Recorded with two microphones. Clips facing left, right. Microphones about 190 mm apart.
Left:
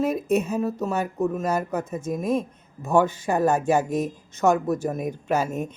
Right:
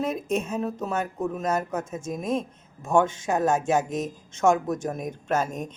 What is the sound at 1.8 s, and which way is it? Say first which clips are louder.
Speech: left 3 dB; 60° left (ahead or behind).